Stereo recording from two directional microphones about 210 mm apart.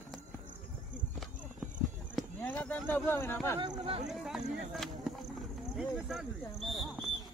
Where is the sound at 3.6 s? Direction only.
25° right (ahead or behind).